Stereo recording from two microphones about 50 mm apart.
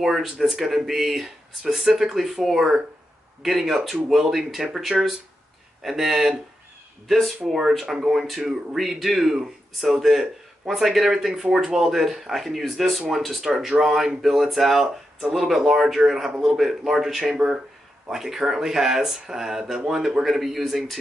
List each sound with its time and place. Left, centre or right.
0.0 s speech: centre
4.9 s speech: right
5.8 s speech: centre